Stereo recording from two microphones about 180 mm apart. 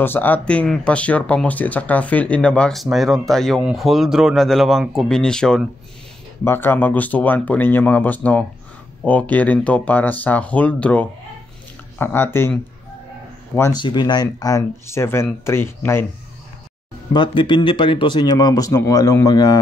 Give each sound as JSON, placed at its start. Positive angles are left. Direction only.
{"t": 0.0, "sound": "speech", "side_deg": 10}
{"t": 13.6, "sound": "speech", "side_deg": 20}
{"t": 17.1, "sound": "speech", "side_deg": 30}